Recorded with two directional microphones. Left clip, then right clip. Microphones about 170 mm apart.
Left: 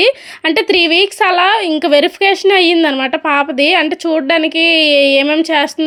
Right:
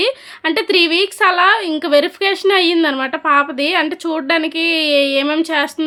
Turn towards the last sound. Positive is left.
turn(degrees=20)  # may be behind; listen again after turning